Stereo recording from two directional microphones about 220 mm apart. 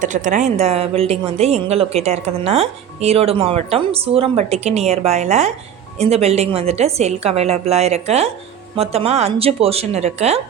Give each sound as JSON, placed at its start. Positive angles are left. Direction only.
{"t": 0.0, "sound": "speech", "side_deg": -35}